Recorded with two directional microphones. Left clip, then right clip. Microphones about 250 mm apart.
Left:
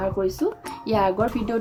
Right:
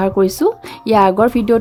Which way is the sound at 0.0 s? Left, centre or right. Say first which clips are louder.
Right 10 dB; right.